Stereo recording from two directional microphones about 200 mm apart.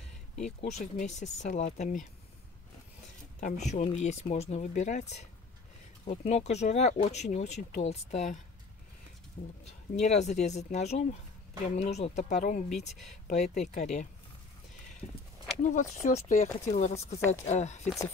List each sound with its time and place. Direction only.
0.4 s speech: 35° left (ahead or behind)
3.3 s speech: 40° left (ahead or behind)
15.6 s speech: 40° left (ahead or behind)